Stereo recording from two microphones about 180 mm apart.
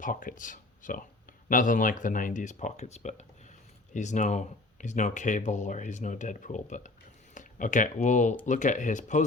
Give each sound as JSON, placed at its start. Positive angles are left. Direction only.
{"t": 0.0, "sound": "speech", "side_deg": 50}